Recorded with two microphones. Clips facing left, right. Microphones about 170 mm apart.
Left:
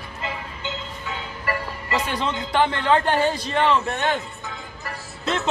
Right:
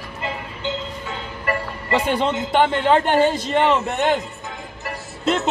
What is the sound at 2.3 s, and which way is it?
A man's voice, 20° right (ahead or behind).